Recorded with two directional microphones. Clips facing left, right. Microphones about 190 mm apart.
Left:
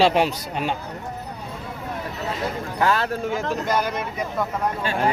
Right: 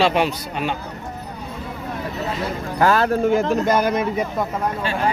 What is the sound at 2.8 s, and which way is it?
Speech, 45° right (ahead or behind).